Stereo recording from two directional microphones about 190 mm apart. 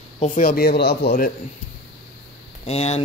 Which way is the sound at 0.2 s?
45° left (ahead or behind).